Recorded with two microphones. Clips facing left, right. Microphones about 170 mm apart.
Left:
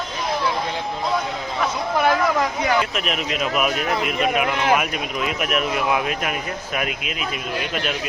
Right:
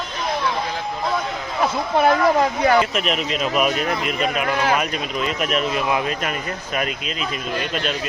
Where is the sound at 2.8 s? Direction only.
Centre (ahead or behind).